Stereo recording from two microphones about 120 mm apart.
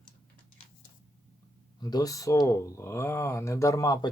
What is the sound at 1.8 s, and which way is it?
Speech, 30° left (ahead or behind).